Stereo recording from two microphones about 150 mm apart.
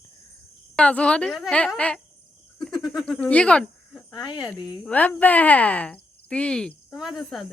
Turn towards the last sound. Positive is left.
turn(degrees=0)  # may be behind; listen again after turning